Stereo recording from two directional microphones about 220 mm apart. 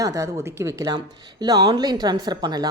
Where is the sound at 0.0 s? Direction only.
15° right (ahead or behind).